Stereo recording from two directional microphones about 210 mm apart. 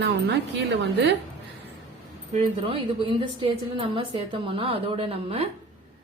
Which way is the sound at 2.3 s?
25° right (ahead or behind).